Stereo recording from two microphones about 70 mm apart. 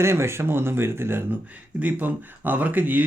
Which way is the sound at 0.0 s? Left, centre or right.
Right.